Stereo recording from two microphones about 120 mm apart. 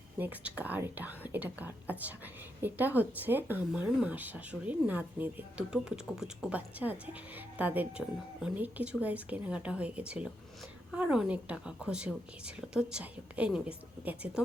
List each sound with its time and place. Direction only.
0.2 s speech: 15° right (ahead or behind)